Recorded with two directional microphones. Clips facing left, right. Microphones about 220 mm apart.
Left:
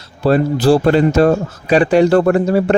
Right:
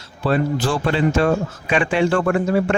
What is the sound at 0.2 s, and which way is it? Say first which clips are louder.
Speech: left 6 dB; 40° left (ahead or behind).